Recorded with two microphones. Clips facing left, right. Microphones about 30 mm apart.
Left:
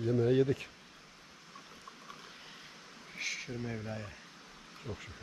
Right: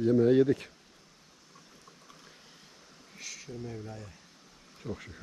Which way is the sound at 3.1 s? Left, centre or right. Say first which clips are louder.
Left 5 dB; left.